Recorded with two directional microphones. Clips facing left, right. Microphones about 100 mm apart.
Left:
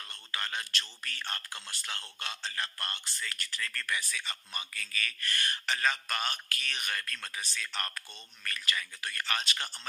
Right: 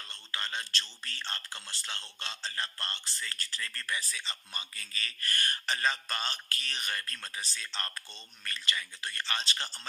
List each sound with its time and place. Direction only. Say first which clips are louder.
0.1 s speech: left 1 dB; 25° right (ahead or behind); by 5.7 s 40° right (ahead or behind)
5.7 s speech: left 1 dB; 25° right (ahead or behind)